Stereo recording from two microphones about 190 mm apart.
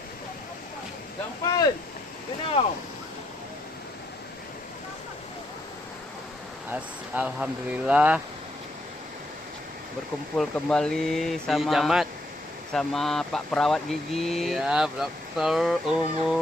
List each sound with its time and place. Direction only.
1.5 s speech: 20° left (ahead or behind)
6.7 s speech: 10° right (ahead or behind)
10.3 s speech: centre (ahead or behind)